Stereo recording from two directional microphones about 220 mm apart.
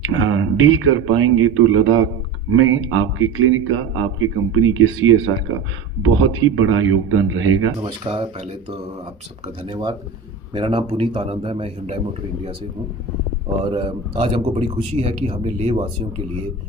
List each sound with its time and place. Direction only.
0.0 s a man's voice: 65° right (ahead or behind)
7.8 s speech: 25° right (ahead or behind)
13.7 s speech: 25° right (ahead or behind)